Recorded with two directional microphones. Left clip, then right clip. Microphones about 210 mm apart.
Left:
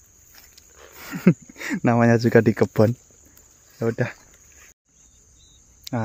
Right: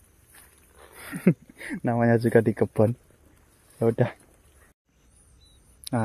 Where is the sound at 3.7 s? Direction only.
5° right (ahead or behind).